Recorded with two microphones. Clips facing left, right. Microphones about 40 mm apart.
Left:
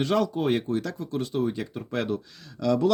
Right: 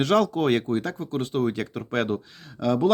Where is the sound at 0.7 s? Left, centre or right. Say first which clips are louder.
Right 2 dB; right.